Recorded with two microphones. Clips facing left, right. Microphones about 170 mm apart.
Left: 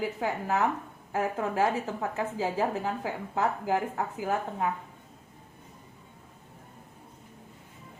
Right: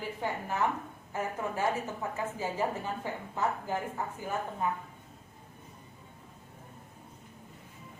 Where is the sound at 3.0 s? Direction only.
90° left.